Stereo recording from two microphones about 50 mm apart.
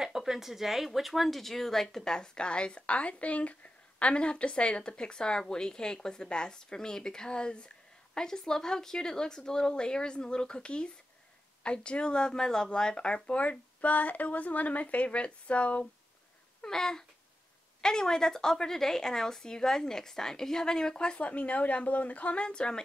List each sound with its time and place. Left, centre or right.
0.0 s speech: centre; by 15.9 s left
16.6 s a sound: centre
17.8 s speech: centre